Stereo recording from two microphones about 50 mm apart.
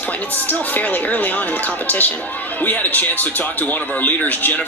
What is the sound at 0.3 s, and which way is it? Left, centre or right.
Speech, left.